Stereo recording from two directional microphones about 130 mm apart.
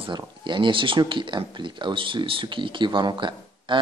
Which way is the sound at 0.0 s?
40° right (ahead or behind).